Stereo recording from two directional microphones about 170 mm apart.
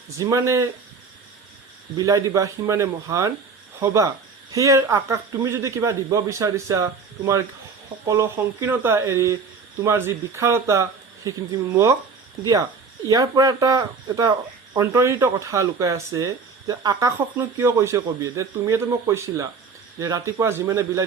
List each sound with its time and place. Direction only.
0.2 s speech: 20° right (ahead or behind)
2.0 s speech: 20° right (ahead or behind)
13.1 s speech: 20° right (ahead or behind)